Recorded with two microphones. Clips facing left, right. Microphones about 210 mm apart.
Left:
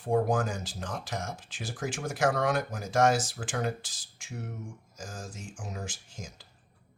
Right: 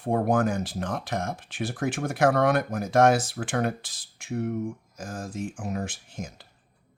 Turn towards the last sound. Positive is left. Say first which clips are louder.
# right 7 dB
turn(degrees=-60)  # may be behind; listen again after turning